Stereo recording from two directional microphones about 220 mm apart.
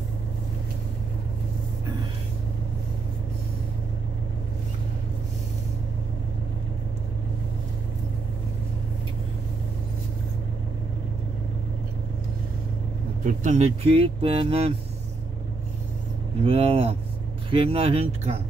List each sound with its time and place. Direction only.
13.2 s speech: 35° right (ahead or behind)
16.4 s speech: 25° right (ahead or behind)